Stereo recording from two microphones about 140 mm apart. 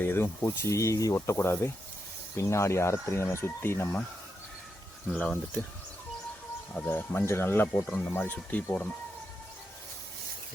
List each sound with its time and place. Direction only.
0.0 s speech: 15° left (ahead or behind)
5.1 s speech: 5° left (ahead or behind)
6.7 s speech: 15° left (ahead or behind)